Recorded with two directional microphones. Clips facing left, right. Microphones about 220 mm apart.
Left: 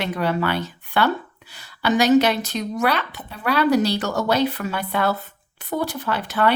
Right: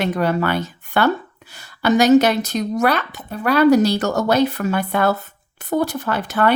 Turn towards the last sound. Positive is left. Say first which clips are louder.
# right 2 dB
turn(degrees=-45)  # may be behind; listen again after turning